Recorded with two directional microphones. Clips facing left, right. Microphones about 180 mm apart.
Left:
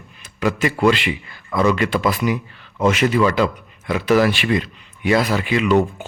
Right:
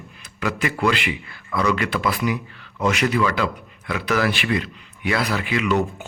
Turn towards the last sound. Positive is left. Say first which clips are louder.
# left 5 dB
turn(degrees=30)  # may be behind; listen again after turning